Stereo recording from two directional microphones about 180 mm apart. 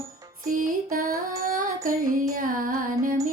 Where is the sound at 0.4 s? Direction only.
50° right (ahead or behind).